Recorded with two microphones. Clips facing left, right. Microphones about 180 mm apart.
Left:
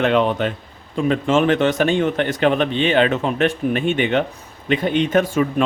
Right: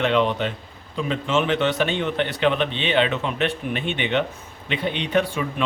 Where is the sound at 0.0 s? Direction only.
45° left (ahead or behind).